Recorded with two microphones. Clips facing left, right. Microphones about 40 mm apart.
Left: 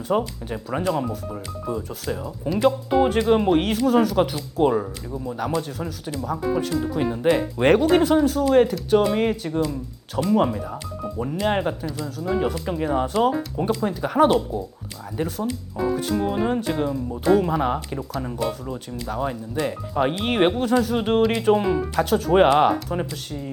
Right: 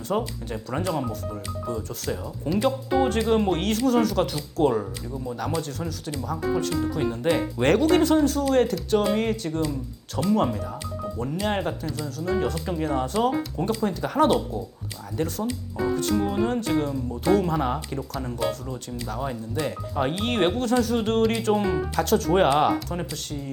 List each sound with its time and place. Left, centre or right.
0.1 s speech: centre